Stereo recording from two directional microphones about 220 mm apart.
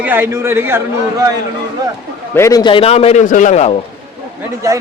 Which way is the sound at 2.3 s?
15° left (ahead or behind).